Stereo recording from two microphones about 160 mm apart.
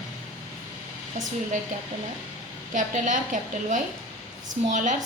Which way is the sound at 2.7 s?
50° right (ahead or behind).